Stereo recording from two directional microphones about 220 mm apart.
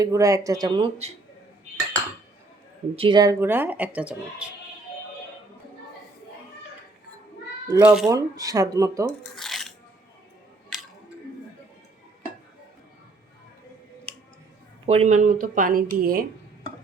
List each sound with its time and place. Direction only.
0.0 s speech: 15° right (ahead or behind)
2.9 s speech: 25° right (ahead or behind); by 4.5 s 5° right (ahead or behind)
7.7 s speech: 5° right (ahead or behind)
8.1 s speech: 15° right (ahead or behind)
9.3 s filing: centre (ahead or behind)
10.7 s scissors: centre (ahead or behind)
14.8 s speech: 30° right (ahead or behind)